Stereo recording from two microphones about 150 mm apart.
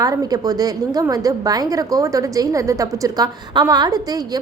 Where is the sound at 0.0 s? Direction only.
25° right (ahead or behind).